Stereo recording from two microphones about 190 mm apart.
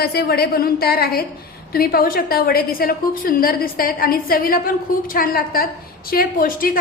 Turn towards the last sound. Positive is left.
turn(degrees=50)  # may be behind; listen again after turning